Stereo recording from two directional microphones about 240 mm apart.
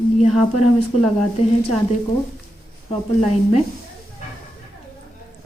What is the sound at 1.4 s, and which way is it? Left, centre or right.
Speech, left.